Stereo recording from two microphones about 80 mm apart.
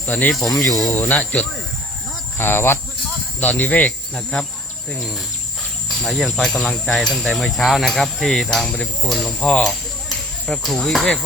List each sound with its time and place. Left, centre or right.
0.0 s speech: left
0.3 s speech: centre
1.2 s cricket: centre
2.4 s speech: left
3.4 s cricket: centre
6.0 s speech: centre